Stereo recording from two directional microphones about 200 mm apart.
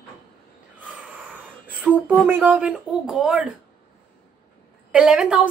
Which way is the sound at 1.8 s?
10° right (ahead or behind).